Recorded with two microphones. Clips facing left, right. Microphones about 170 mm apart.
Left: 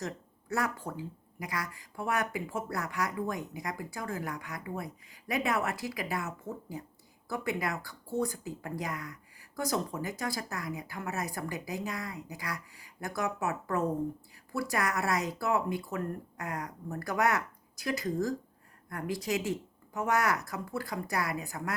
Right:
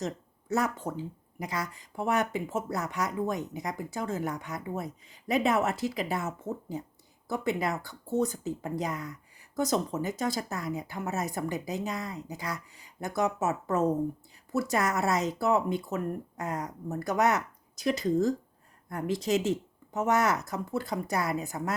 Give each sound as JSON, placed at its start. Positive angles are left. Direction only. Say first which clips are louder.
{"t": 0.0, "sound": "speech", "louder": "right 4 dB", "side_deg": -20}